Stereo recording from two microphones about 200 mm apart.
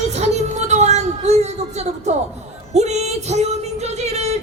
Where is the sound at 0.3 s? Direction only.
35° right (ahead or behind).